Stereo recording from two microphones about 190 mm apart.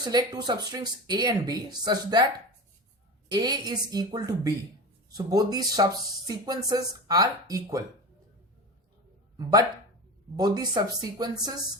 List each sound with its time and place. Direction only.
0.0 s speech: 20° right (ahead or behind)
9.4 s speech: 20° right (ahead or behind)